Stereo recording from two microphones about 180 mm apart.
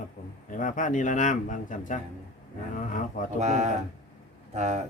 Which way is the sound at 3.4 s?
40° right (ahead or behind).